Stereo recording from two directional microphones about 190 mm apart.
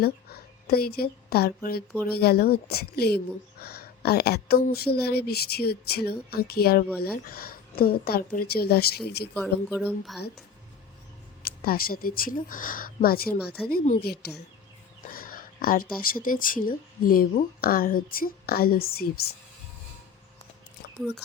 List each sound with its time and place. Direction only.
0.7 s a woman's voice: 55° left (ahead or behind)
9.3 s speech: 5° left (ahead or behind)
11.4 s speech: 50° left (ahead or behind)
21.0 s speech: centre (ahead or behind)